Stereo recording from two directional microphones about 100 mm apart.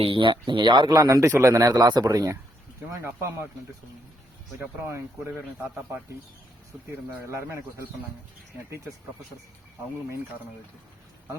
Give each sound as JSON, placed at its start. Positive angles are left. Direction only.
{"t": 0.0, "sound": "a man's voice", "side_deg": -60}